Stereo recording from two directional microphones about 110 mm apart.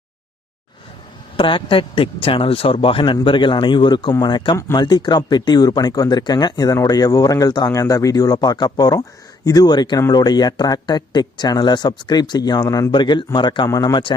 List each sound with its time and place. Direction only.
1.4 s a man's voice: 50° left (ahead or behind); by 12.9 s 30° left (ahead or behind)
12.9 s a man's voice: 45° left (ahead or behind)
13.7 s speech: 35° left (ahead or behind)